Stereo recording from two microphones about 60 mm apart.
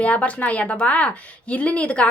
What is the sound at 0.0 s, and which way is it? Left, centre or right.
A woman's voice, left.